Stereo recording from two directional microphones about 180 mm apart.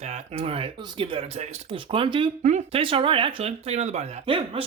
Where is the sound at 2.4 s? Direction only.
40° right (ahead or behind).